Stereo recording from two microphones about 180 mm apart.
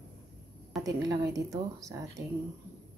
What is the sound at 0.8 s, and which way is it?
Speech, 20° right (ahead or behind).